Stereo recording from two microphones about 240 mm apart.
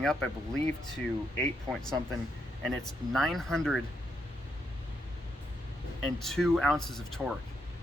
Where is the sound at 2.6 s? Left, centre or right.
Centre.